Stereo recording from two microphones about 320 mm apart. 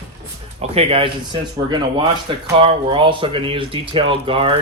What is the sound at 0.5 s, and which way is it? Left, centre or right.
Speech, centre.